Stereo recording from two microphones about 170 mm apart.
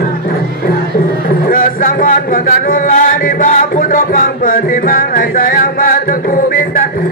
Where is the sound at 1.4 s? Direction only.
55° left (ahead or behind).